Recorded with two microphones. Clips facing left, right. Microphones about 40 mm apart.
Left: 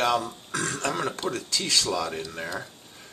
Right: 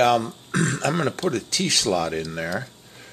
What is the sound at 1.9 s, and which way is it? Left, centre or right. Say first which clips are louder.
Speech: right 5 dB; right.